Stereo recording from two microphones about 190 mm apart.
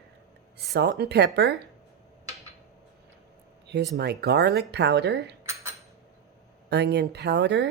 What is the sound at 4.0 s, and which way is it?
Speech, 60° right (ahead or behind).